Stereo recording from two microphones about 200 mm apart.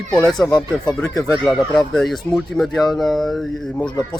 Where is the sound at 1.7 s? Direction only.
Centre (ahead or behind).